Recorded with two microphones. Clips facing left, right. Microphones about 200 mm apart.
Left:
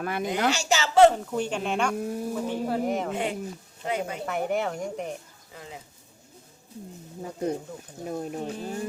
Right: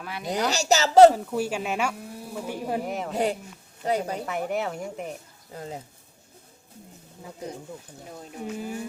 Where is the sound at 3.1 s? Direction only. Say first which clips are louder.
Right 3 dB; 40° right (ahead or behind).